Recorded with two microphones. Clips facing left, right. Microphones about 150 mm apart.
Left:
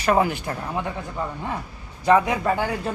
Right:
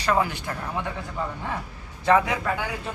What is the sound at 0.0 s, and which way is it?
Speech, 25° left (ahead or behind).